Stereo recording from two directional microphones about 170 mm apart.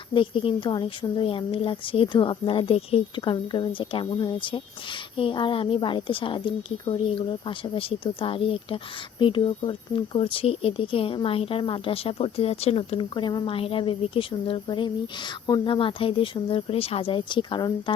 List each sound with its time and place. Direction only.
0.1 s speech: 30° left (ahead or behind)